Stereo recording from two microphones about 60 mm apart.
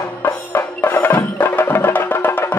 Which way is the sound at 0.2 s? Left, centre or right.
Left.